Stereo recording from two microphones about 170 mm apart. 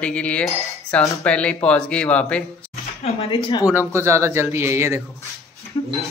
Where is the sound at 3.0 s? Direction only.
35° left (ahead or behind).